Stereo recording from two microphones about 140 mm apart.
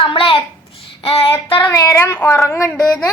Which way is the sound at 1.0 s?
40° left (ahead or behind).